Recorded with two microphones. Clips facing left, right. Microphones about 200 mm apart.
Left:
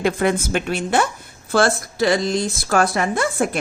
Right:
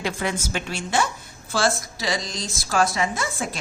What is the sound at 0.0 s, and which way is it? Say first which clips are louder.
A woman's voice: left 8 dB; 55° left (ahead or behind).